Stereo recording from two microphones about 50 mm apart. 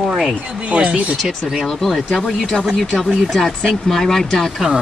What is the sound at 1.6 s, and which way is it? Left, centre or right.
Speech, centre.